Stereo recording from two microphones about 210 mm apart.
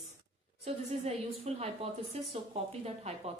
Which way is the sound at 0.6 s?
30° right (ahead or behind).